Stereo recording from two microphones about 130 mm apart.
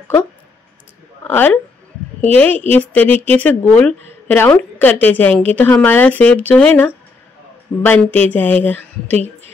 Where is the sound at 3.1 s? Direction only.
50° right (ahead or behind).